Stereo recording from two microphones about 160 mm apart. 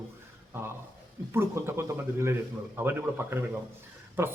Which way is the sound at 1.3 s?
15° right (ahead or behind).